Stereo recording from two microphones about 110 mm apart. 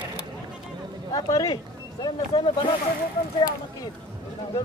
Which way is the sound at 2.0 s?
45° left (ahead or behind).